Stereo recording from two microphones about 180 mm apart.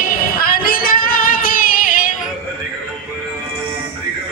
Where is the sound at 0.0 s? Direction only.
55° left (ahead or behind).